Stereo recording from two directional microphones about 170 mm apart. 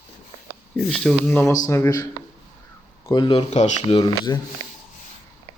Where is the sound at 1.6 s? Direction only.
15° left (ahead or behind).